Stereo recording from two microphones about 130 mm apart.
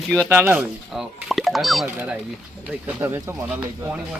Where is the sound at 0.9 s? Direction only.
Centre (ahead or behind).